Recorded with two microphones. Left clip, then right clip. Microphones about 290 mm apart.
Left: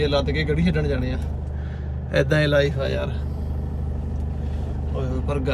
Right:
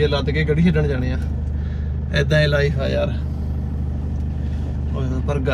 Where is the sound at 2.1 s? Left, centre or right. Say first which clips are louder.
Right 1 dB; left; by 3.1 s centre.